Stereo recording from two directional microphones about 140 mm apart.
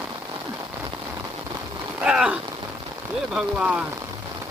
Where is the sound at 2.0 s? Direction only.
5° right (ahead or behind).